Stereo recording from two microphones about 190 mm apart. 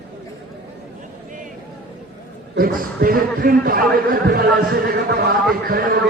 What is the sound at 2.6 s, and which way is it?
A man's voice, 50° right (ahead or behind).